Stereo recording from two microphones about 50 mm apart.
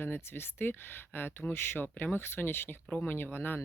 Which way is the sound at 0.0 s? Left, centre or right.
Left.